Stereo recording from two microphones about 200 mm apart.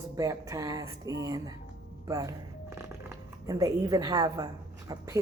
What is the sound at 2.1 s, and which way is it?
Shuffling cards, 15° right (ahead or behind).